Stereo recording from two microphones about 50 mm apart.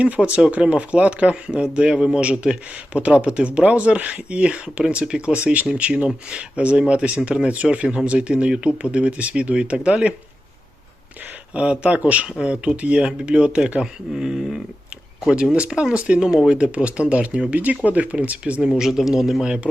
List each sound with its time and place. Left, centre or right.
0.0 s speech: right
5.4 s speech: right
11.5 s speech: right
14.1 s speech: centre
15.5 s speech: right
18.8 s a man's voice: centre
19.5 s speech: right